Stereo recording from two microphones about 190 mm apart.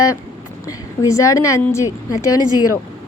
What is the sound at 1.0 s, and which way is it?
Speech, 15° left (ahead or behind).